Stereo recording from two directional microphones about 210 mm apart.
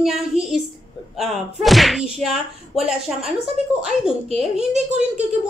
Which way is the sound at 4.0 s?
Centre (ahead or behind).